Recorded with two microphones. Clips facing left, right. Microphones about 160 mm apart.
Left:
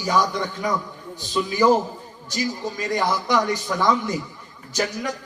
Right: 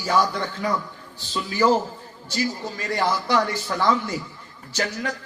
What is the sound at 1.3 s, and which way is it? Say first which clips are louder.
A man's voice: left 2 dB; 15° left (ahead or behind).